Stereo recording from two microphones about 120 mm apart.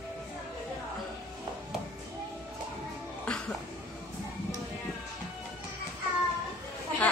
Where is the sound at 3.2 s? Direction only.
10° left (ahead or behind).